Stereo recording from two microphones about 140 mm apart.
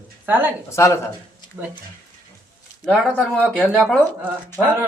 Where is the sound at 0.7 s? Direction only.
20° left (ahead or behind).